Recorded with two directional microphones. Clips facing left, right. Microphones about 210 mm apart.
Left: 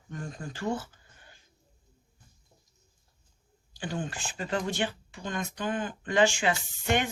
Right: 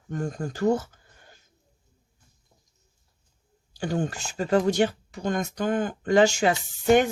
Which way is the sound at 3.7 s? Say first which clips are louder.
Right 7 dB; 45° right (ahead or behind).